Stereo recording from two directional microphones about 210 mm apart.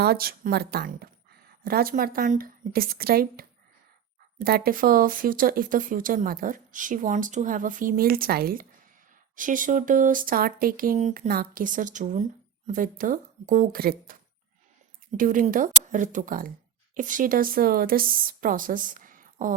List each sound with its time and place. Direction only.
0.0 s a woman's voice: 45° right (ahead or behind)
15.2 s speech: 40° right (ahead or behind)